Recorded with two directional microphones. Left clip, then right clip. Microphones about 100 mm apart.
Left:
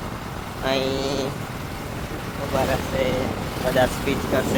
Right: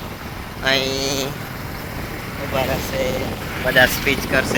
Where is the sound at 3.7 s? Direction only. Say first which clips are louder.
Right 7 dB; 35° right (ahead or behind).